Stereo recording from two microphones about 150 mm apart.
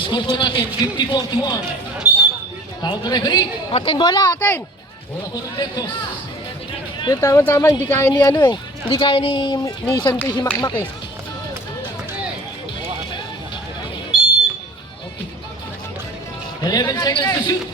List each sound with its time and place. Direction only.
0.0 s a man's voice: 30° left (ahead or behind)
2.0 s a sound: 10° right (ahead or behind)
2.8 s a woman's voice: 25° left (ahead or behind)
4.4 s speech: 15° left (ahead or behind)
7.0 s a woman's voice: 25° left (ahead or behind)
8.9 s a man's voice: 30° left (ahead or behind)
14.1 s a sound: 5° right (ahead or behind)
16.6 s a woman's voice: 25° left (ahead or behind)